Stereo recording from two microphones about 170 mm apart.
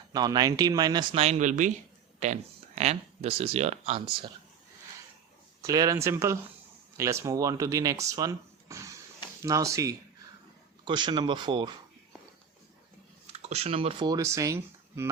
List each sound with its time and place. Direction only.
0.1 s speech: 25° right (ahead or behind)
1.1 s speech: 40° right (ahead or behind)
5.6 s speech: 20° right (ahead or behind)
13.3 s speech: 40° right (ahead or behind)
14.1 s speech: 20° right (ahead or behind)